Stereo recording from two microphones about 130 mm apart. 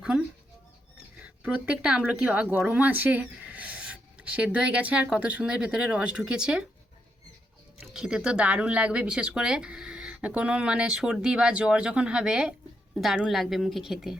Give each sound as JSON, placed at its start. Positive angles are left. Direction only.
{"t": 1.2, "sound": "speech", "side_deg": -10}
{"t": 7.9, "sound": "a woman's voice", "side_deg": -5}